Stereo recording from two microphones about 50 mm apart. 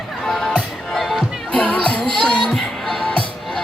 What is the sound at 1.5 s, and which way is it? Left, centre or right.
Music, left.